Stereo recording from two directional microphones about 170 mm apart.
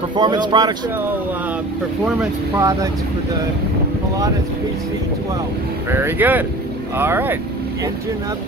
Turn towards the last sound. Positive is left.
turn(degrees=-10)  # may be behind; listen again after turning